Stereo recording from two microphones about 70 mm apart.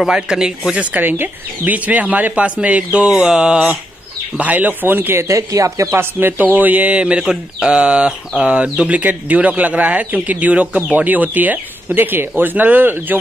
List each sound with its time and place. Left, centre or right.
0.0 s speech: centre
0.9 s speech: right; by 3.7 s centre
4.4 s speech: right
5.3 s speech: right
5.9 s speech: right